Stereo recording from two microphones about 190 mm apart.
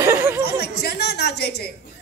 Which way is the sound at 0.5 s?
55° left (ahead or behind).